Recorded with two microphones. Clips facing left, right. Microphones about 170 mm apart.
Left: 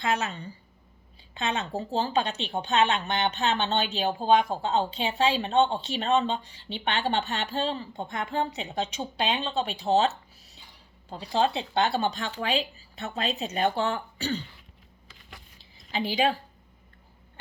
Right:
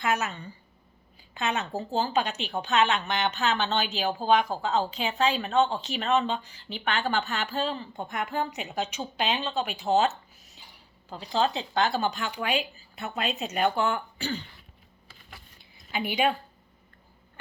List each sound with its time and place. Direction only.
0.0 s speech: 30° left (ahead or behind)
15.9 s speech: 30° left (ahead or behind)